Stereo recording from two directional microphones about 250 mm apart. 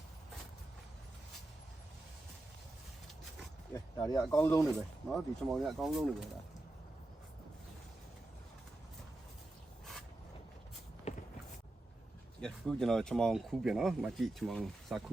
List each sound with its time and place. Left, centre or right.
3.8 s speech: centre
4.6 s speech: centre
11.1 s walk: left
12.4 s speech: centre